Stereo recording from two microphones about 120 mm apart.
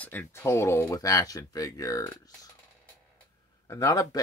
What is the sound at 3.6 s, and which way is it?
Speech, 25° left (ahead or behind).